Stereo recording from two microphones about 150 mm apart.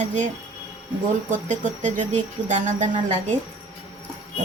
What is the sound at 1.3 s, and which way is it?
A woman's voice, 55° right (ahead or behind).